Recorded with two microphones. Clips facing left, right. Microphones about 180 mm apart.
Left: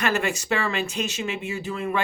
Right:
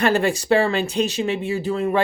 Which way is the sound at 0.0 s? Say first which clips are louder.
Right 6 dB; 35° right (ahead or behind).